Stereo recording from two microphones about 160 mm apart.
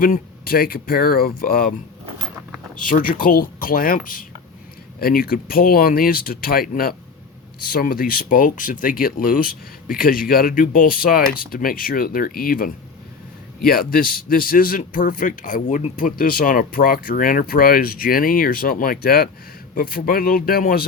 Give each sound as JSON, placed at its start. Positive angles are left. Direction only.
{"t": 0.0, "sound": "a man's voice", "side_deg": 65}
{"t": 2.7, "sound": "a man's voice", "side_deg": 55}